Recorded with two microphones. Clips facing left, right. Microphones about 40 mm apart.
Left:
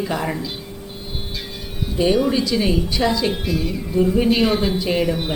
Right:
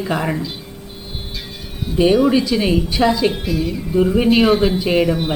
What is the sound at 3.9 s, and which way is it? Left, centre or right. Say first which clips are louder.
Speech: right 2 dB; centre.